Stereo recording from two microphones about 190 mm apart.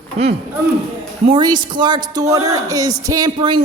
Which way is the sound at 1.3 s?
25° right (ahead or behind).